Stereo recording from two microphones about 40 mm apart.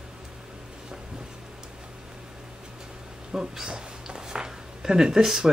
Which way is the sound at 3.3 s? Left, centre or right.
Centre.